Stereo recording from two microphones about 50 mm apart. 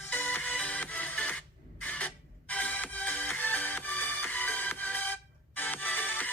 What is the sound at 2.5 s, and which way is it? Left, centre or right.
Music, left.